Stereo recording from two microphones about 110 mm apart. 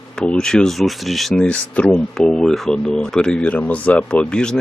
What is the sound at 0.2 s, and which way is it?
Speech, 5° left (ahead or behind).